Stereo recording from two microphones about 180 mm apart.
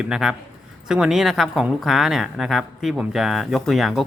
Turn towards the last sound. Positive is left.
turn(degrees=0)  # may be behind; listen again after turning